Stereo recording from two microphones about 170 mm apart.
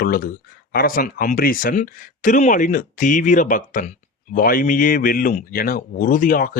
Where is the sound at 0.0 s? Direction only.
60° left (ahead or behind).